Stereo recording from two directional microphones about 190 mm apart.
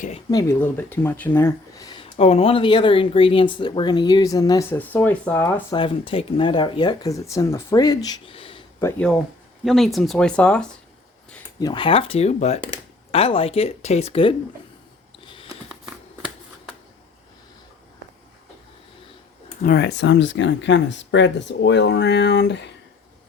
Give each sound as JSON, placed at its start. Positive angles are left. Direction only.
{"t": 0.3, "sound": "speech", "side_deg": 15}
{"t": 2.1, "sound": "speech", "side_deg": 35}
{"t": 5.7, "sound": "speech", "side_deg": 25}
{"t": 8.8, "sound": "speech", "side_deg": 15}
{"t": 9.6, "sound": "speech", "side_deg": 0}
{"t": 11.6, "sound": "speech", "side_deg": 25}
{"t": 19.6, "sound": "speech", "side_deg": 60}